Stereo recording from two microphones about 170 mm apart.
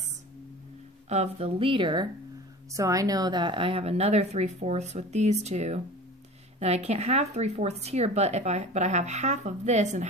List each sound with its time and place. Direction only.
1.0 s speech: 40° right (ahead or behind)